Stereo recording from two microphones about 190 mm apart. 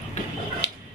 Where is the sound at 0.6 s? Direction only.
65° left (ahead or behind).